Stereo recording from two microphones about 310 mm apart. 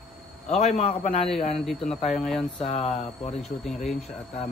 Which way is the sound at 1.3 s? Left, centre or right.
Centre.